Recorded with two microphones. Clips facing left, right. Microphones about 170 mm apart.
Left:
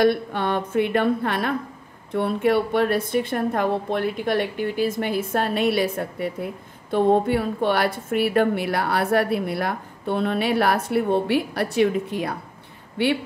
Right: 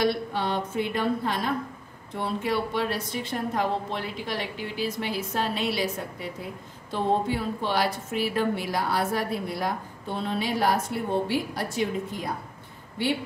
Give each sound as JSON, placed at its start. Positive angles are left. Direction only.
{"t": 0.0, "sound": "a woman's voice", "side_deg": 55}